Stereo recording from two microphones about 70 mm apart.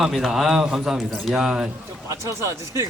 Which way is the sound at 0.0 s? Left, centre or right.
Centre.